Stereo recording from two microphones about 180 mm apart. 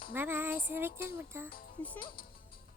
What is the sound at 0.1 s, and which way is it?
Speech, 10° right (ahead or behind).